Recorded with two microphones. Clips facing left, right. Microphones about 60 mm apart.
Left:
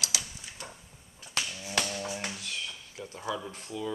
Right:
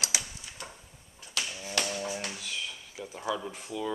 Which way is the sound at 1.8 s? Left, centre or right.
Centre.